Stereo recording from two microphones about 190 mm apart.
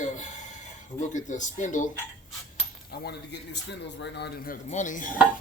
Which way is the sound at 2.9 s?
60° left (ahead or behind).